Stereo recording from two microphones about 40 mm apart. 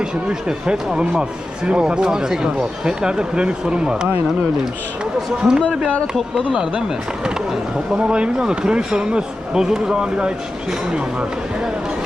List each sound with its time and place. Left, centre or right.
0.0 s speech: centre
5.4 s speech: centre